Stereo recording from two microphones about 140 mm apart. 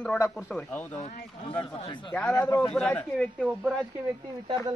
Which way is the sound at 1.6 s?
35° left (ahead or behind).